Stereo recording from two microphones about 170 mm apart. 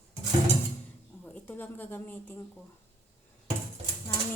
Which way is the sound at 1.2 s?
10° left (ahead or behind).